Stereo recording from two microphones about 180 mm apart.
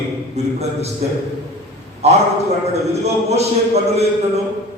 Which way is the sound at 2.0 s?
35° right (ahead or behind).